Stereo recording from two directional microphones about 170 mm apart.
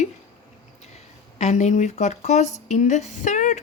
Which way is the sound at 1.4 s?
45° left (ahead or behind).